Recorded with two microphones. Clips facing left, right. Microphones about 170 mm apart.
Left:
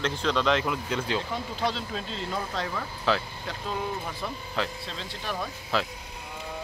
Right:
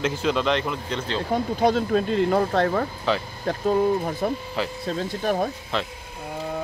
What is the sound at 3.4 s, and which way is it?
Speech, 45° right (ahead or behind).